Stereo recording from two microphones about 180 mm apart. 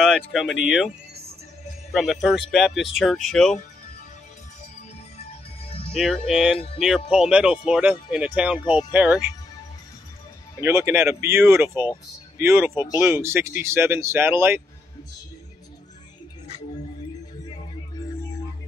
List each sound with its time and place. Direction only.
0.3 s speech: centre (ahead or behind)
1.9 s speech: centre (ahead or behind)
5.2 s music: 35° left (ahead or behind)
5.9 s speech: centre (ahead or behind)
10.6 s speech: 15° right (ahead or behind)